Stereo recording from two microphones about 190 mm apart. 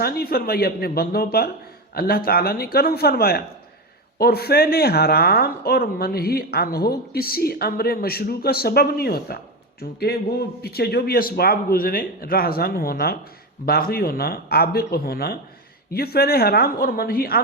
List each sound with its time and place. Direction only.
0.0 s a man's voice: 55° left (ahead or behind)